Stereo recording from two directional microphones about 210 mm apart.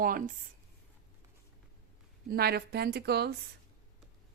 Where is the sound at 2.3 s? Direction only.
50° right (ahead or behind).